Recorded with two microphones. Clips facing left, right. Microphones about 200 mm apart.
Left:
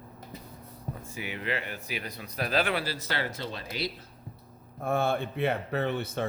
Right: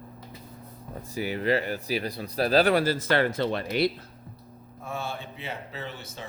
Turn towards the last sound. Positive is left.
turn(degrees=60)  # may be behind; listen again after turning